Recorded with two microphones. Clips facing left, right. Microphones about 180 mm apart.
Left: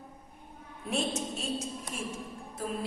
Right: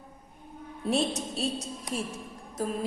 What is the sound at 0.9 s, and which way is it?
Speech, 35° right (ahead or behind).